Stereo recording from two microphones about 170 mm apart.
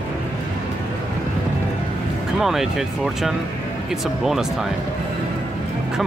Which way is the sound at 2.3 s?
Centre (ahead or behind).